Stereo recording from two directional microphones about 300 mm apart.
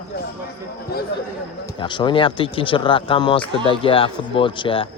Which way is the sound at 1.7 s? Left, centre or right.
Centre.